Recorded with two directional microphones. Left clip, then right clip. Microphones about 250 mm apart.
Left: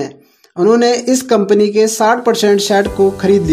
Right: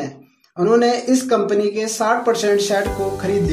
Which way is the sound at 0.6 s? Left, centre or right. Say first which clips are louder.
Left 4 dB; left.